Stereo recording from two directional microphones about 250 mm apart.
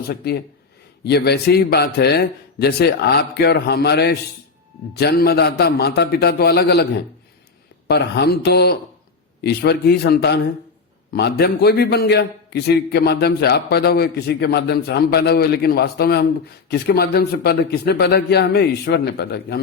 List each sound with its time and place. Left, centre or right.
0.1 s a man's voice: left
7.9 s a man's voice: left